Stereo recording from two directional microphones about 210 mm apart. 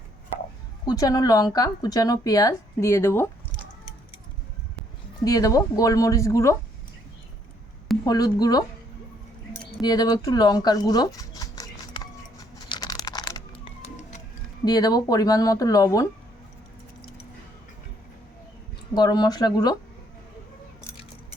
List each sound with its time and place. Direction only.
0.9 s speech: 15° left (ahead or behind)
5.2 s speech: 15° left (ahead or behind)
8.0 s speech: 20° left (ahead or behind)
9.8 s speech: 20° left (ahead or behind)
12.6 s a sound: 20° left (ahead or behind)
14.6 s speech: 20° left (ahead or behind)
18.9 s speech: 20° left (ahead or behind)